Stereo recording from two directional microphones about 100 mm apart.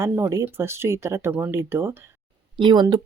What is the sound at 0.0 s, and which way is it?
Speech, 30° right (ahead or behind).